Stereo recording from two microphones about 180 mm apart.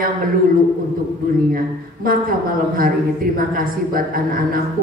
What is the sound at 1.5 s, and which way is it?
A man's voice, 55° right (ahead or behind).